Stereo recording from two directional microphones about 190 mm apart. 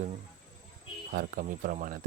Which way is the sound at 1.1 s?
45° right (ahead or behind).